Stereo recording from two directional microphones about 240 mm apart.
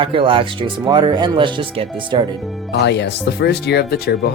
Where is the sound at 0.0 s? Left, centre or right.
Right.